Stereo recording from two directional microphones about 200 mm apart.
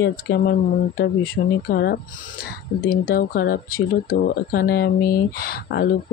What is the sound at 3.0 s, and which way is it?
Speech, 50° left (ahead or behind).